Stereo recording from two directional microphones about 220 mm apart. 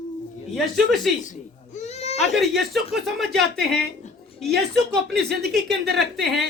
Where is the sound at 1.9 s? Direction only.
30° left (ahead or behind).